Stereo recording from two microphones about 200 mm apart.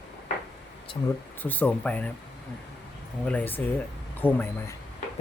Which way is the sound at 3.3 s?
10° left (ahead or behind).